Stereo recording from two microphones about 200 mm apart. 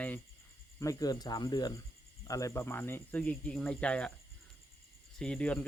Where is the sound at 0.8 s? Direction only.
15° left (ahead or behind).